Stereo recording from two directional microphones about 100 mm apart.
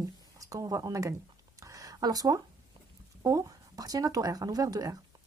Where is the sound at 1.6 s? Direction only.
35° right (ahead or behind).